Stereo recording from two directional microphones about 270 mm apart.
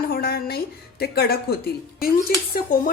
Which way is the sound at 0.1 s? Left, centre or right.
Left.